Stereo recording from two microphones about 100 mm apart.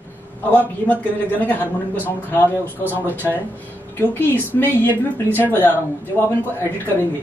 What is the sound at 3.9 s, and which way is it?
A woman's voice, 20° left (ahead or behind).